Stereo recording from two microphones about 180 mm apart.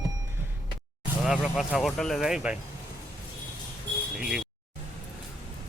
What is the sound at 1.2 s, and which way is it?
Speech, 5° right (ahead or behind).